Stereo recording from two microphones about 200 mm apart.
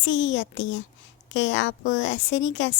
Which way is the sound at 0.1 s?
65° left (ahead or behind).